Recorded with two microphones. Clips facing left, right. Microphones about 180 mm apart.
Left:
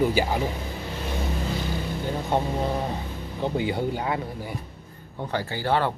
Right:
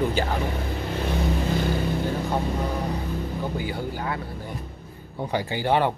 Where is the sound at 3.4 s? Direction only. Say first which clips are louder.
Left 3 dB; 25° left (ahead or behind).